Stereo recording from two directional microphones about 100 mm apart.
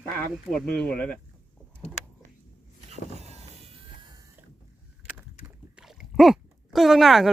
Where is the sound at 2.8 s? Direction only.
90° right.